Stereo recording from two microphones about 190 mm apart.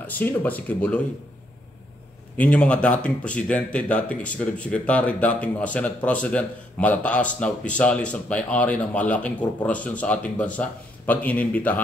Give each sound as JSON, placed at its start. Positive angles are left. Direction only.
{"t": 0.0, "sound": "speech", "side_deg": 10}
{"t": 2.3, "sound": "speech", "side_deg": 10}